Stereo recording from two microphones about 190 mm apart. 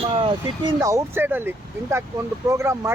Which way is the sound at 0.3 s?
20° right (ahead or behind).